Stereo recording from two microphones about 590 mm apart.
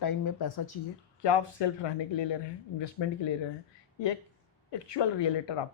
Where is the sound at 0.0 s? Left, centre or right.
Left.